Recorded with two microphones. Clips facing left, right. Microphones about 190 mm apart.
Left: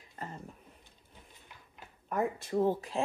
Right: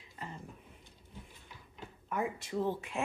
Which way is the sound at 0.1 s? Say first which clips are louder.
Left 2 dB; 45° left (ahead or behind).